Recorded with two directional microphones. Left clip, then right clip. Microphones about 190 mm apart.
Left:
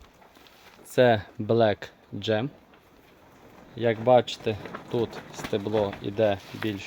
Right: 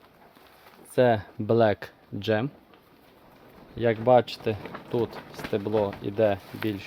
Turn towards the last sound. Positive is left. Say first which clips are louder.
# even
turn(degrees=-15)  # may be behind; listen again after turning